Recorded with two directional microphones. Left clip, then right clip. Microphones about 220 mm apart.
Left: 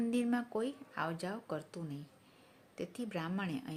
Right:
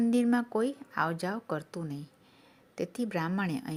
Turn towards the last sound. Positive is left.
turn(degrees=-30)  # may be behind; listen again after turning